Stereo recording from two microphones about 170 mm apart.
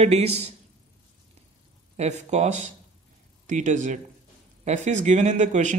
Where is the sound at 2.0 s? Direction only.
40° right (ahead or behind).